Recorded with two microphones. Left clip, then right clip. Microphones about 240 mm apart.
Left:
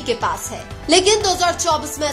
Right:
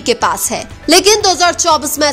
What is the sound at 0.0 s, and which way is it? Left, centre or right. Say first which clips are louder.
Speech: right 7 dB; right.